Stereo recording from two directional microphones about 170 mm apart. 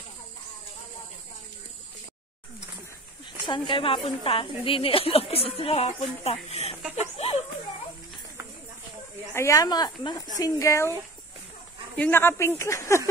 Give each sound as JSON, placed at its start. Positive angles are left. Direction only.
{"t": 3.4, "sound": "a woman's voice", "side_deg": 30}
{"t": 9.3, "sound": "speech", "side_deg": 15}
{"t": 12.0, "sound": "speech", "side_deg": 15}